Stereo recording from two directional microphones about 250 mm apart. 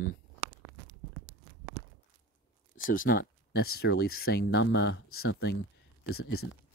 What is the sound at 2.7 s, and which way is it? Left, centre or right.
Speech, left.